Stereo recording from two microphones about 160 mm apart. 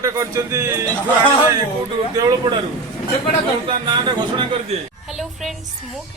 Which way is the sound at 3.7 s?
30° right (ahead or behind).